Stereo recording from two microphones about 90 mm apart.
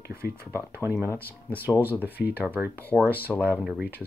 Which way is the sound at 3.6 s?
10° right (ahead or behind).